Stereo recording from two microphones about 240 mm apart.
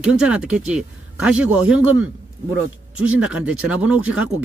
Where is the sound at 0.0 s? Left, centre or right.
Centre.